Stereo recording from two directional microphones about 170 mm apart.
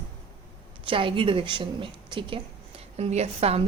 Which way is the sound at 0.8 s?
30° right (ahead or behind).